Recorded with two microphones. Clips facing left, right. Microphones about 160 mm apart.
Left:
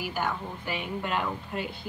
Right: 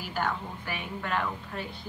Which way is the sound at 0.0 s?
10° left (ahead or behind).